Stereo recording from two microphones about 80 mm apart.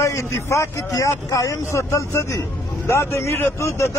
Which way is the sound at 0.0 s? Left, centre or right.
Left.